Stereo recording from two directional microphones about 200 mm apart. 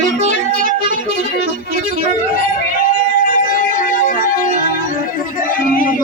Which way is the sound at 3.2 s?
45° left (ahead or behind).